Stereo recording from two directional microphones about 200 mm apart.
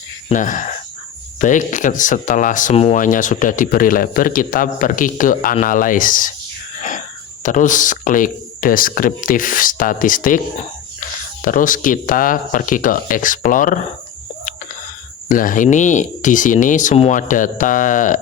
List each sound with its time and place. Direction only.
0.3 s speech: 40° left (ahead or behind)
6.7 s a sound: 40° left (ahead or behind)
7.4 s speech: 40° left (ahead or behind)
11.4 s speech: 40° left (ahead or behind)
15.3 s speech: 40° left (ahead or behind)